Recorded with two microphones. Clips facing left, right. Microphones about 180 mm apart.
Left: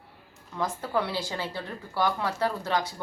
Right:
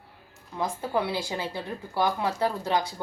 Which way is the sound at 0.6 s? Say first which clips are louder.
Right 1 dB; 15° right (ahead or behind).